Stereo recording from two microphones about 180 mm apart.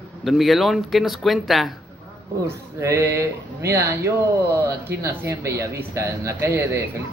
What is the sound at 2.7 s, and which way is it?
Speech, 15° right (ahead or behind).